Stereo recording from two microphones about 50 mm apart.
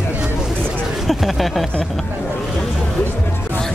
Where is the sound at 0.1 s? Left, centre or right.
Centre.